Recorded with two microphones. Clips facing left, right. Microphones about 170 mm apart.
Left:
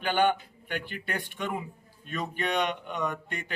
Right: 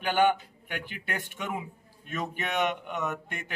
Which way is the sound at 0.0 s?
5° right (ahead or behind).